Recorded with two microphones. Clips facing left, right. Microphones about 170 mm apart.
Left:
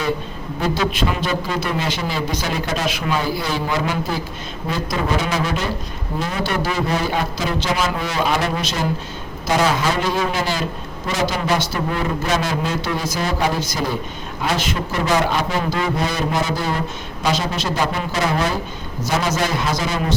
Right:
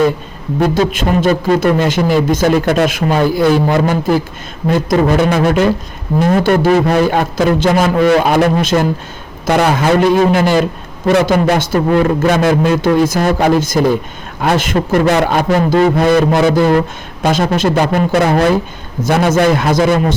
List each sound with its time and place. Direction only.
0.6 s a man's voice: 50° right (ahead or behind)